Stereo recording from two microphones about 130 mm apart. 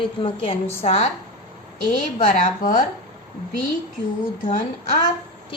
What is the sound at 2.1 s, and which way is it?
Speech, 60° left (ahead or behind).